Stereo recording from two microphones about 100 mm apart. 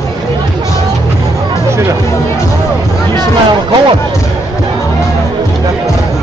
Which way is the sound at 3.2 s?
50° right (ahead or behind).